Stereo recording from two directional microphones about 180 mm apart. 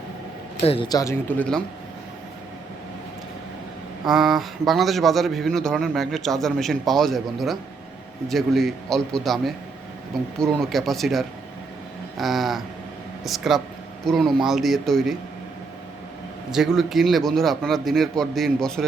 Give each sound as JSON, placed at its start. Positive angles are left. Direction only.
{"t": 0.6, "sound": "a man's voice", "side_deg": 35}
{"t": 0.9, "sound": "speech", "side_deg": 20}
{"t": 4.0, "sound": "a man's voice", "side_deg": 0}
{"t": 16.5, "sound": "a man's voice", "side_deg": 0}